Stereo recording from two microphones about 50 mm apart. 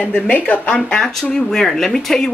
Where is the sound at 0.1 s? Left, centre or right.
Left.